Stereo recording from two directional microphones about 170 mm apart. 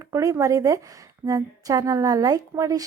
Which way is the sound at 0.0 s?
20° right (ahead or behind).